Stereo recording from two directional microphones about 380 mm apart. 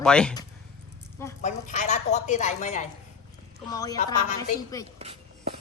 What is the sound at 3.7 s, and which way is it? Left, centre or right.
Speech, centre.